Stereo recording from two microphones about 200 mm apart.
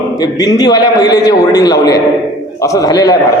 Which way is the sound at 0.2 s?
20° left (ahead or behind).